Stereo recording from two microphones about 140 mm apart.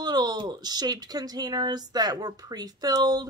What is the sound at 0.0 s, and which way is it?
Speech, 30° right (ahead or behind).